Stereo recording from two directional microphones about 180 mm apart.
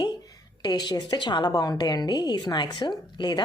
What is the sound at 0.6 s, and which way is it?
A woman's voice, 25° left (ahead or behind).